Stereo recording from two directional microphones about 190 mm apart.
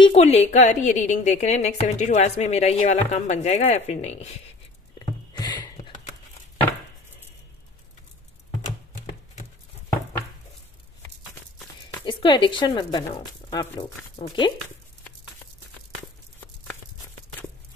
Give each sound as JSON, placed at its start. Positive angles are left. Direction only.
{"t": 0.0, "sound": "a woman's voice", "side_deg": 30}
{"t": 4.9, "sound": "a sound", "side_deg": 20}
{"t": 9.0, "sound": "horse", "side_deg": 35}
{"t": 12.0, "sound": "speech", "side_deg": 25}